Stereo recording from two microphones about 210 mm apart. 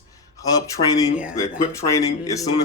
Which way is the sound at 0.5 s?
15° left (ahead or behind).